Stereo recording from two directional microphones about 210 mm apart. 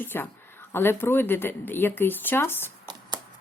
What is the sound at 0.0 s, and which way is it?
Speech, 10° left (ahead or behind).